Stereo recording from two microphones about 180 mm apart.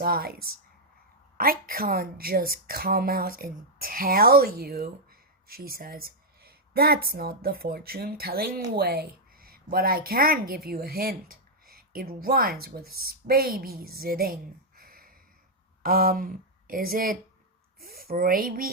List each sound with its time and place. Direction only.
0.0 s a woman's voice: 55° right (ahead or behind)
14.8 s a sound: 55° right (ahead or behind)
15.8 s speech: 55° right (ahead or behind)